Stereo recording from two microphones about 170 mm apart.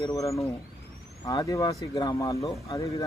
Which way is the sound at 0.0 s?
25° left (ahead or behind).